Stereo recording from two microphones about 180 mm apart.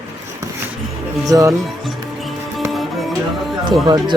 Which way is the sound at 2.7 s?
Centre (ahead or behind).